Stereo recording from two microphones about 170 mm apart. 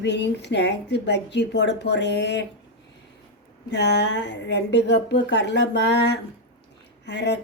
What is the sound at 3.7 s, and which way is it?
A woman's voice, 80° left.